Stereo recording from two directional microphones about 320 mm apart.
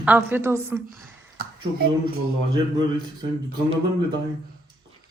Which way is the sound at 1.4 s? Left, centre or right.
Right.